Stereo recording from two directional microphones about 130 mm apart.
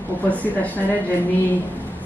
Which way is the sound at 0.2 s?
10° left (ahead or behind).